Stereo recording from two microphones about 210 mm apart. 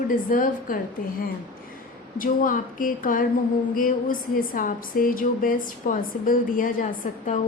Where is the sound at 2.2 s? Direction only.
40° left (ahead or behind).